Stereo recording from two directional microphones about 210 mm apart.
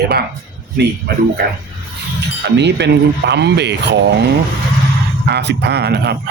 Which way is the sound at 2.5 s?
55° right (ahead or behind).